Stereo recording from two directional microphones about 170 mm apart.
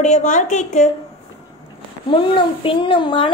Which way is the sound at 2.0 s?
30° left (ahead or behind).